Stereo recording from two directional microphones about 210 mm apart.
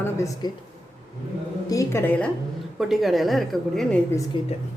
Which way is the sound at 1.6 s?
15° left (ahead or behind).